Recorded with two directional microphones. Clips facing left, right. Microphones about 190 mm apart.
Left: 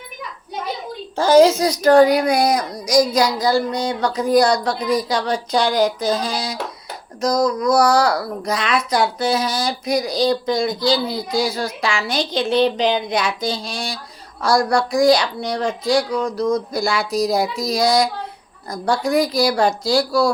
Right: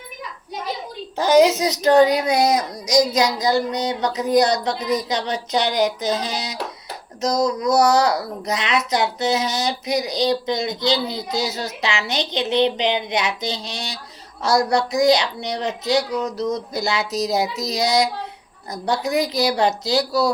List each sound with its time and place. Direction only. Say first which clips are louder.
1.2 s speech: left 3 dB; 15° right (ahead or behind)